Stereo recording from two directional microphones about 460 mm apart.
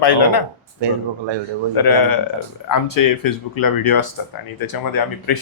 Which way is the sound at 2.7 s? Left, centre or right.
Left.